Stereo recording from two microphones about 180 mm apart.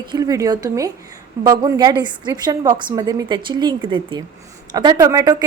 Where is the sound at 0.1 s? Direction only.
20° right (ahead or behind).